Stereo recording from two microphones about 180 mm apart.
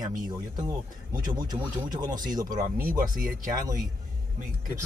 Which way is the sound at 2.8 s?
50° right (ahead or behind).